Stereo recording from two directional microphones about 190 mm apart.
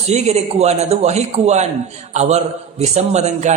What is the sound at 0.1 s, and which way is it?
A man's voice, 35° right (ahead or behind).